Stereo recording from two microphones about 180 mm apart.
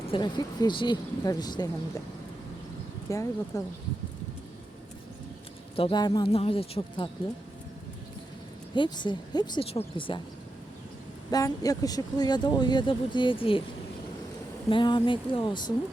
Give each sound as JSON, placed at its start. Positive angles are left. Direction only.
{"t": 0.1, "sound": "speech", "side_deg": 25}
{"t": 3.1, "sound": "speech", "side_deg": 15}
{"t": 5.7, "sound": "speech", "side_deg": 25}
{"t": 8.7, "sound": "speech", "side_deg": 25}
{"t": 11.3, "sound": "speech", "side_deg": 20}
{"t": 14.7, "sound": "speech", "side_deg": 25}